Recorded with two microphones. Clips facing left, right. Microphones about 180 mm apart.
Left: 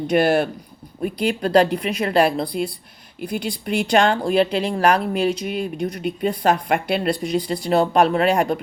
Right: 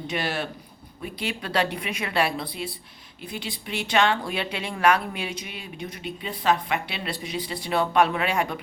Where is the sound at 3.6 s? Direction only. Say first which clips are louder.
Left 5 dB; 40° left (ahead or behind).